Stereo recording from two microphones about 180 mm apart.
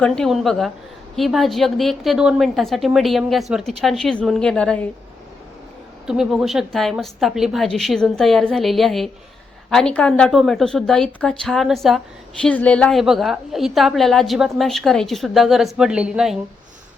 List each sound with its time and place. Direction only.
0.0 s a woman's voice: 5° left (ahead or behind)
6.1 s a woman's voice: centre (ahead or behind)